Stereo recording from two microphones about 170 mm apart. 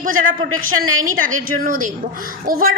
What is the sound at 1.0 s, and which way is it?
A woman's voice, 50° right (ahead or behind).